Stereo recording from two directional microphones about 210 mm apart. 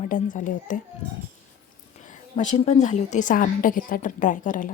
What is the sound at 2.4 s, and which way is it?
A woman's voice, 30° left (ahead or behind).